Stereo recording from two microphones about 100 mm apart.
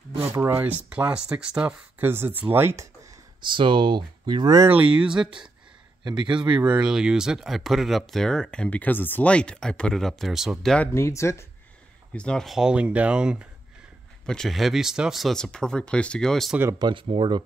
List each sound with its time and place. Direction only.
0.4 s speech: 20° right (ahead or behind)
3.4 s speech: 55° right (ahead or behind)
4.9 s speech: 5° right (ahead or behind)
6.0 s speech: 50° right (ahead or behind)
6.6 s speech: 10° right (ahead or behind)
10.9 s speech: 30° left (ahead or behind)
12.1 s speech: 10° left (ahead or behind)
12.4 s speech: 5° right (ahead or behind)
14.2 s speech: 5° left (ahead or behind)
16.7 s speech: 50° right (ahead or behind)